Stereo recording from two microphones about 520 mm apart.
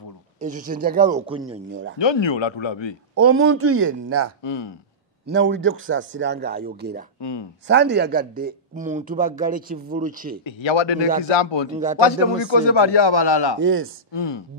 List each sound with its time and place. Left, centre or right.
0.4 s speech: centre
1.7 s a man's voice: right
2.0 s speech: left
3.2 s a man's voice: right
4.4 s speech: left
5.2 s a man's voice: right
7.2 s speech: left
7.6 s speech: centre
10.4 s speech: left
11.7 s speech: centre
12.4 s speech: left
13.6 s a man's voice: right
14.1 s speech: left